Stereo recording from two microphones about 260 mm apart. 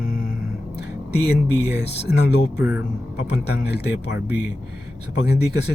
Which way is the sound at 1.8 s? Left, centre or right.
Left.